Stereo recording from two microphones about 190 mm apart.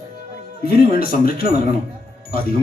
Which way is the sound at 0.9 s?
50° left (ahead or behind).